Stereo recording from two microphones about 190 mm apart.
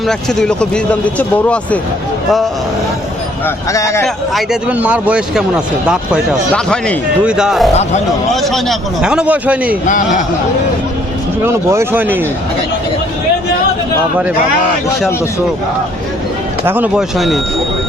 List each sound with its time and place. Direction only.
0.1 s a man's voice: 5° left (ahead or behind)
3.4 s speech: 15° left (ahead or behind)
4.0 s a man's voice: 5° right (ahead or behind)
9.8 s speech: 40° left (ahead or behind)
11.4 s speech: 15° right (ahead or behind)
16.6 s a man's voice: 10° right (ahead or behind)